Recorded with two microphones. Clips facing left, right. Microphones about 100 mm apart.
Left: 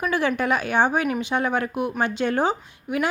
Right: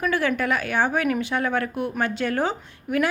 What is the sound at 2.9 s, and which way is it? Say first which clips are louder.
Speech: right 2 dB; centre (ahead or behind).